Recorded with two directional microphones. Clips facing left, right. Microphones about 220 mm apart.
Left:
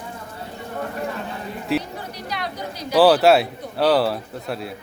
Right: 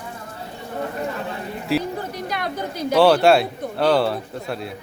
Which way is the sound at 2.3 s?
50° right (ahead or behind).